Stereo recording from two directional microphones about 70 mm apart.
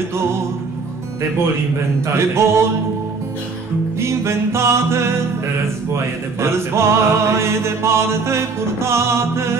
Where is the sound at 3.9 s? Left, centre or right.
Right.